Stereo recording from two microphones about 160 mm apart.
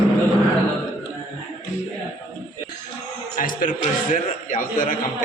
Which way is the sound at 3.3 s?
60° left (ahead or behind).